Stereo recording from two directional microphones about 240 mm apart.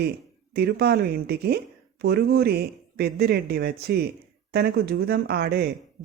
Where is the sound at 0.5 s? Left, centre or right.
Right.